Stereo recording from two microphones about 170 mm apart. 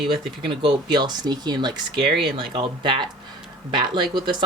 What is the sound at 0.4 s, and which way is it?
Speech, 25° right (ahead or behind).